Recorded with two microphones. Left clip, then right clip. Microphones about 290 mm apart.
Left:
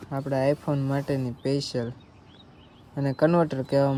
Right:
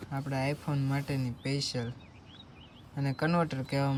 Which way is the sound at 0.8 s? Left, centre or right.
Centre.